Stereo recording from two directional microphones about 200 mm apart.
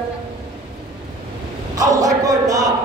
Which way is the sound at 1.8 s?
15° right (ahead or behind).